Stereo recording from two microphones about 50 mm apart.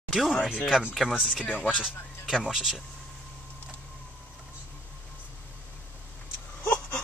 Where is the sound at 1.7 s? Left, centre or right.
Centre.